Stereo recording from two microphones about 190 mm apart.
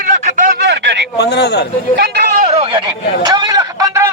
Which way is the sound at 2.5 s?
35° right (ahead or behind).